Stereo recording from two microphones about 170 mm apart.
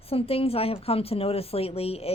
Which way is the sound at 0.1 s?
35° left (ahead or behind).